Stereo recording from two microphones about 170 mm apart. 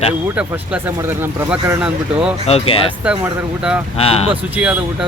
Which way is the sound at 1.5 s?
5° right (ahead or behind).